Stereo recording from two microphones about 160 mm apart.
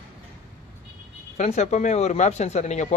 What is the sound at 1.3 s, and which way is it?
Speech, 45° left (ahead or behind).